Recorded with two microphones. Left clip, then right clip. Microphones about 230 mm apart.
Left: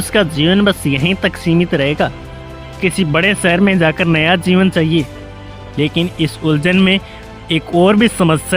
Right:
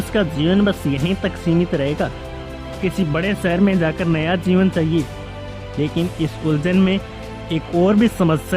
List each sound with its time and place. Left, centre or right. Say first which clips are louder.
0.1 s speech: left 6 dB; left